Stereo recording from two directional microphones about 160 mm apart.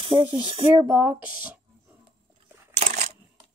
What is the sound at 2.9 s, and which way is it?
Crushing, 60° right (ahead or behind).